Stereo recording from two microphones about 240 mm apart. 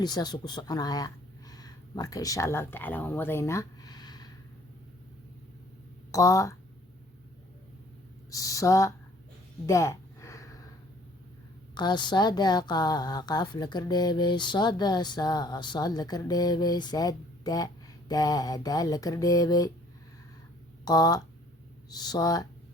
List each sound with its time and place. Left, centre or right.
0.0 s speech: centre
6.1 s speech: centre
8.3 s speech: centre
9.6 s a sound: centre
11.7 s speech: centre
20.8 s speech: centre